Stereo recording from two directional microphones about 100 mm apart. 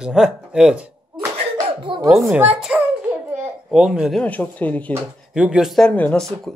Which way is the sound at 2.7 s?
15° right (ahead or behind).